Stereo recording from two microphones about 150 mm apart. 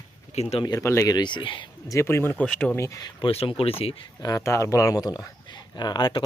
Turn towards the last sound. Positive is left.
turn(degrees=30)  # may be behind; listen again after turning